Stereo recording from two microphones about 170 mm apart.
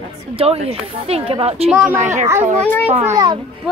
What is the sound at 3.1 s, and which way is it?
Speech, 25° right (ahead or behind).